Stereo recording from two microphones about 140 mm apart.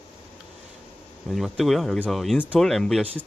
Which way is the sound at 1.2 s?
Centre (ahead or behind).